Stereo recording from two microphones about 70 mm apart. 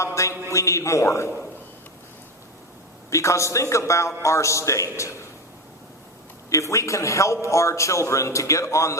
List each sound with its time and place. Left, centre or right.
0.0 s a man's voice: left
3.1 s a man's voice: left
6.5 s a man's voice: left